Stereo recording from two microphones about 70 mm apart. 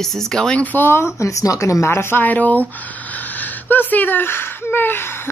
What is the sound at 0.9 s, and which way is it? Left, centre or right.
Speech, left.